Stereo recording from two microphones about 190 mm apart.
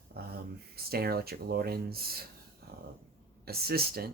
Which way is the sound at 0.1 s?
55° right (ahead or behind).